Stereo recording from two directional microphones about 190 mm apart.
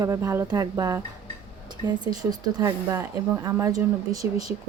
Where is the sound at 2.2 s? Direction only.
20° right (ahead or behind).